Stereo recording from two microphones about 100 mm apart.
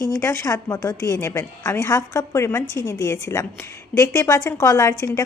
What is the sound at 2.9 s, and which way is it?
A woman's voice, 30° left (ahead or behind).